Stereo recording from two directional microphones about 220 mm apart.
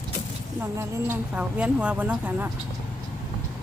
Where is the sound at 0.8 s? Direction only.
10° right (ahead or behind).